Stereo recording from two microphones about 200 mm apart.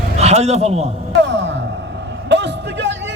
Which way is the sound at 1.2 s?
60° right (ahead or behind).